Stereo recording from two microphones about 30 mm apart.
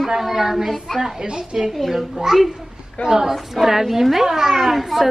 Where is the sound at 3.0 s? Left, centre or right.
Right.